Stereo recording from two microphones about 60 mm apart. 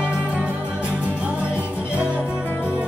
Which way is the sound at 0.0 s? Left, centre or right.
Right.